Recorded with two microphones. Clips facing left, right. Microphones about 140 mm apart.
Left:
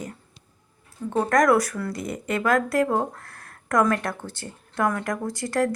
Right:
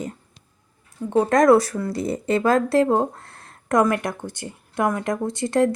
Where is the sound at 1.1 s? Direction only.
25° right (ahead or behind).